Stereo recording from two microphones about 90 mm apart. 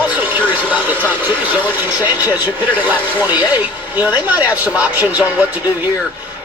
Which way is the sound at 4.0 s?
20° right (ahead or behind).